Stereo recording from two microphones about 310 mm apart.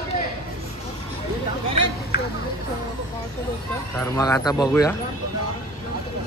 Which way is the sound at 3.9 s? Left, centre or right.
Centre.